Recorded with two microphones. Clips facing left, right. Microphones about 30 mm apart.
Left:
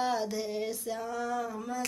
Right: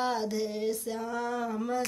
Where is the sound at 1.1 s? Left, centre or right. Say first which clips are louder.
Right 3 dB; right.